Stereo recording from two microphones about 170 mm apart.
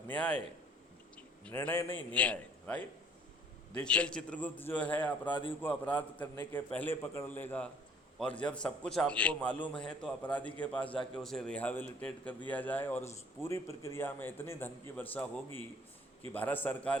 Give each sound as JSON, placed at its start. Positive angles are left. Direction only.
{"t": 0.1, "sound": "a man's voice", "side_deg": 10}
{"t": 1.1, "sound": "a sound", "side_deg": 10}
{"t": 2.1, "sound": "a man's voice", "side_deg": 10}
{"t": 5.3, "sound": "a man's voice", "side_deg": 30}
{"t": 5.6, "sound": "a man's voice", "side_deg": 10}